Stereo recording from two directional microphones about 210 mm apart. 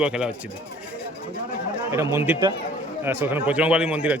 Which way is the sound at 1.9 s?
15° right (ahead or behind).